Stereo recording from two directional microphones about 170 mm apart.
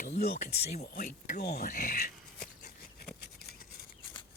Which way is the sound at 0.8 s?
60° left (ahead or behind).